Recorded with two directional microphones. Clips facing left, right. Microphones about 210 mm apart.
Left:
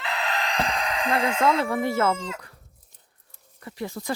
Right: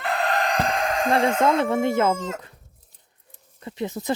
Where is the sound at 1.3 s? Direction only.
50° right (ahead or behind).